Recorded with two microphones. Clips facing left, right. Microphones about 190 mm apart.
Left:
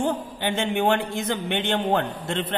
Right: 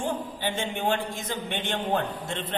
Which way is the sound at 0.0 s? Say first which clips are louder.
Left 4 dB; 65° left (ahead or behind).